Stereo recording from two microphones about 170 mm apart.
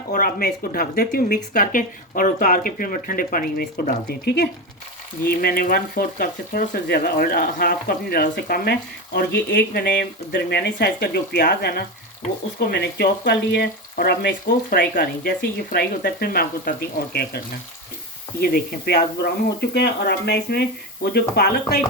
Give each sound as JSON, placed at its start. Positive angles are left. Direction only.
{"t": 0.1, "sound": "speech", "side_deg": 60}
{"t": 9.5, "sound": "speech", "side_deg": 75}
{"t": 19.7, "sound": "speech", "side_deg": 80}